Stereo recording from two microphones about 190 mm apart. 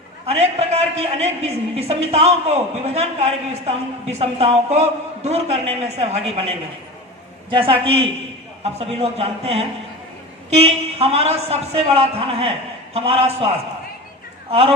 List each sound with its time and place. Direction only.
0.3 s a man's voice: 35° right (ahead or behind)